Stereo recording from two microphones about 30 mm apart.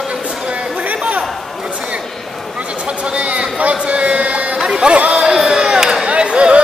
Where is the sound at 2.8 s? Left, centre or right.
Right.